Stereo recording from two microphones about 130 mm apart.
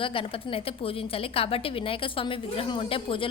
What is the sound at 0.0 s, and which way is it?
A woman's voice, 45° left (ahead or behind).